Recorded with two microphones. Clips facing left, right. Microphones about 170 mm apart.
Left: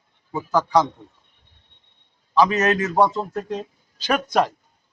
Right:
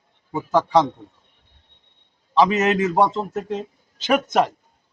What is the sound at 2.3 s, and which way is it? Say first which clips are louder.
A man's voice: right 1 dB; 25° right (ahead or behind).